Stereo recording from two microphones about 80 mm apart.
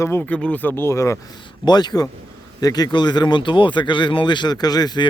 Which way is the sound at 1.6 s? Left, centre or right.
Left.